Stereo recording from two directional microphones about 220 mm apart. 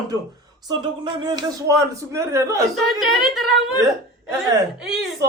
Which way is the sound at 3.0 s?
Centre (ahead or behind).